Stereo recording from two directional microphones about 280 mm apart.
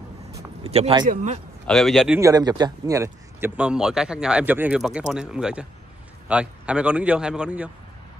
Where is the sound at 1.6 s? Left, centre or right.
Centre.